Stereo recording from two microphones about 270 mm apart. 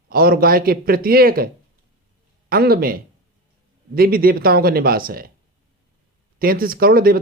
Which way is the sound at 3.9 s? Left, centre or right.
Right.